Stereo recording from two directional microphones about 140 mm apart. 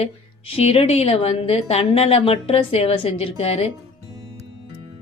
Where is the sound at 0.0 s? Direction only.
45° left (ahead or behind).